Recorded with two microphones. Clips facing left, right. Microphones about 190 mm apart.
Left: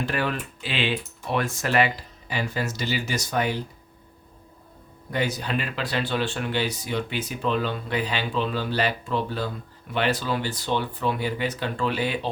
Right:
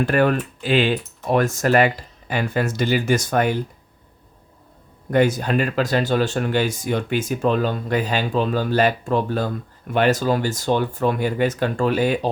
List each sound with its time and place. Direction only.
0.0 s speech: 50° right (ahead or behind)
5.1 s speech: 50° right (ahead or behind)